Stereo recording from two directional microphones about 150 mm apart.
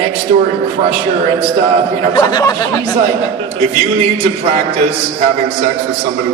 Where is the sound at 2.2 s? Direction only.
25° left (ahead or behind).